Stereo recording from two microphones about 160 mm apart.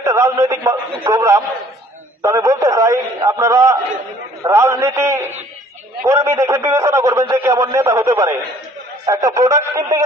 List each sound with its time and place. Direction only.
0.0 s a man's voice: 20° right (ahead or behind)